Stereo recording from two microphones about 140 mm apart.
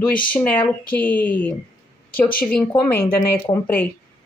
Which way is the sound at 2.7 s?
15° left (ahead or behind).